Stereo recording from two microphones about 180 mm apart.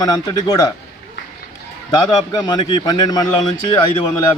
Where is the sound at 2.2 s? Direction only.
20° left (ahead or behind).